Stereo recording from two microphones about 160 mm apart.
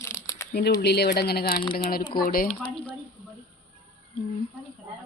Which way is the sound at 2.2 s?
65° left (ahead or behind).